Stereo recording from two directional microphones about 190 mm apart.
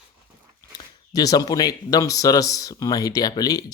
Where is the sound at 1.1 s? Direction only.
20° left (ahead or behind).